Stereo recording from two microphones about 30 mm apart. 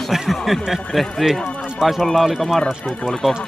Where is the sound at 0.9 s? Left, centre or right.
Centre.